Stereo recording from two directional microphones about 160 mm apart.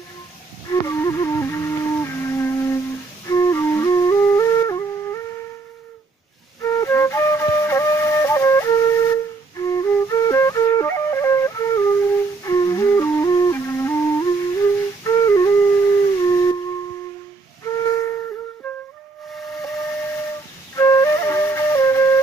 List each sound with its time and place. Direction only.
0.7 s music: 20° left (ahead or behind)
3.3 s flute: 20° left (ahead or behind)
6.6 s flute: 20° left (ahead or behind)
16.2 s howl: 20° left (ahead or behind)
17.6 s flute: 20° left (ahead or behind)
19.7 s steam whistle: 15° left (ahead or behind)
20.7 s flute: 20° left (ahead or behind)